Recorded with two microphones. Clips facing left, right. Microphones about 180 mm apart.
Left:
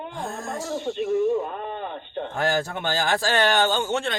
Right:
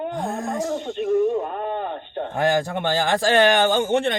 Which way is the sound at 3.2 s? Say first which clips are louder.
Right 6 dB; 60° right (ahead or behind).